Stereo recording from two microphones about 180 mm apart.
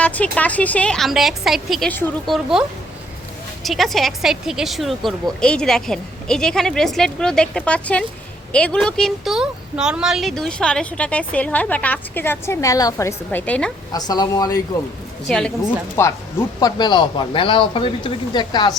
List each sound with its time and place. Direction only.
0.0 s speech: 10° left (ahead or behind)
13.9 s speech: 20° left (ahead or behind)
15.3 s speech: 5° left (ahead or behind)
16.0 s speech: 15° left (ahead or behind)